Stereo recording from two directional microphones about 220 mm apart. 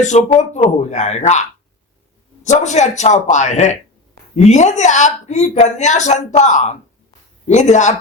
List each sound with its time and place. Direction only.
0.0 s a woman's voice: 30° left (ahead or behind)